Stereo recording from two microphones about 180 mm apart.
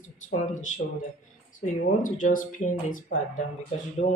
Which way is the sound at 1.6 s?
45° left (ahead or behind).